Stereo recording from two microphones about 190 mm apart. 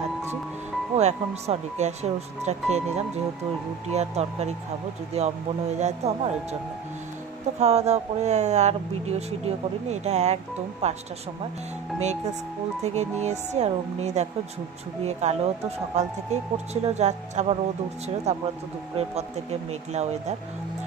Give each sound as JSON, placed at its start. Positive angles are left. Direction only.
{"t": 0.9, "sound": "speech", "side_deg": -35}
{"t": 3.9, "sound": "speech", "side_deg": -35}
{"t": 7.5, "sound": "speech", "side_deg": -35}
{"t": 12.8, "sound": "speech", "side_deg": -35}
{"t": 19.9, "sound": "speech", "side_deg": -35}